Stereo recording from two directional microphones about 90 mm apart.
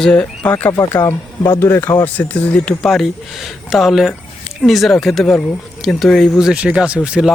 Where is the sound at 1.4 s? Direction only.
30° left (ahead or behind).